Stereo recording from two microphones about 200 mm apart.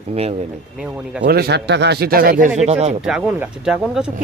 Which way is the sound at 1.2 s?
55° right (ahead or behind).